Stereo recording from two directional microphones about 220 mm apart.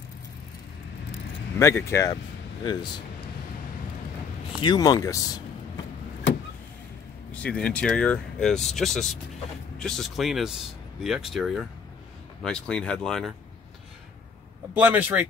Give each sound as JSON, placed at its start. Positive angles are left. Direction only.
{"t": 1.6, "sound": "speech", "side_deg": 10}
{"t": 4.6, "sound": "speech", "side_deg": 20}
{"t": 7.4, "sound": "speech", "side_deg": 5}
{"t": 14.7, "sound": "speech", "side_deg": -10}